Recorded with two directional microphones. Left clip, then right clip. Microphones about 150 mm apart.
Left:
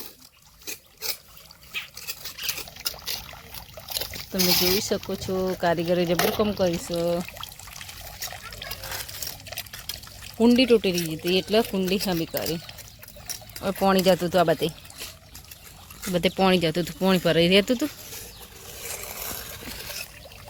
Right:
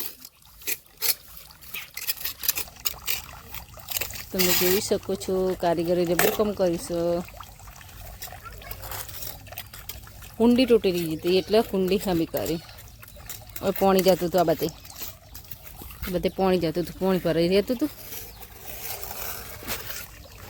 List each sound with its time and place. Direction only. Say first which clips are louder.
0.6 s rub: right 3 dB; 10° right (ahead or behind)
2.0 s a sound: right 1 dB; 15° right (ahead or behind)
3.8 s trickle: left 1 dB; 50° right (ahead or behind)
4.3 s speech: left 1 dB; 25° right (ahead or behind); by 7.2 s 10° right (ahead or behind)
7.3 s pour: left 5 dB; 65° right (ahead or behind)
8.3 s water: left 3 dB; 75° right (ahead or behind)
10.3 s speech: left 1 dB; 5° right (ahead or behind)
13.7 s speech: even; 25° right (ahead or behind)
16.1 s speech: left 2 dB; 5° right (ahead or behind)